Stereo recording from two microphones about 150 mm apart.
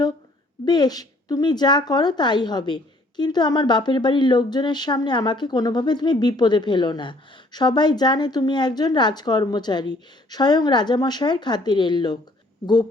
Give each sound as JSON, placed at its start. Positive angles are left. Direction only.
{"t": 0.6, "sound": "a woman's voice", "side_deg": 25}